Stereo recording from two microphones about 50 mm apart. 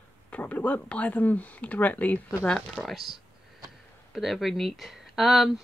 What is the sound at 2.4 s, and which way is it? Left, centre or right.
Speech, centre.